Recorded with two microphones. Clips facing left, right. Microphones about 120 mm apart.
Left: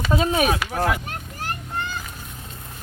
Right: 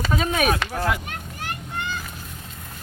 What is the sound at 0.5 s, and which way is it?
Speech, 10° left (ahead or behind).